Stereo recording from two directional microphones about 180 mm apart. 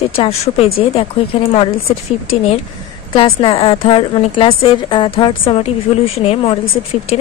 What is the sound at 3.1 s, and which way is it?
A woman's voice, 30° left (ahead or behind).